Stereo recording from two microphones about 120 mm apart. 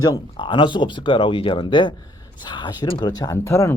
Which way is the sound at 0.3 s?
45° left (ahead or behind).